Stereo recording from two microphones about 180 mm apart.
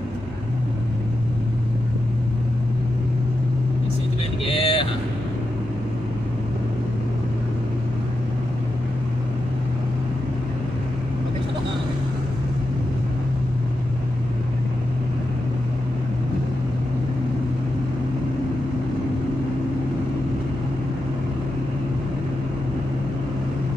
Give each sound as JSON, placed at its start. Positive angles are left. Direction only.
{"t": 4.5, "sound": "vehicle", "side_deg": 30}